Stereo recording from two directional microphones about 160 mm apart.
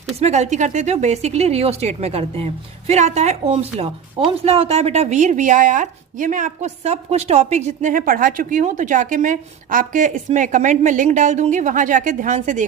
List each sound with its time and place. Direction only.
0.2 s speech: 45° right (ahead or behind)